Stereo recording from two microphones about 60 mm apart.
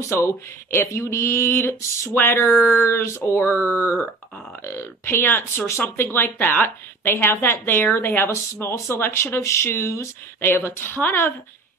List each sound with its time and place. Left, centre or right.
0.1 s a woman's voice: left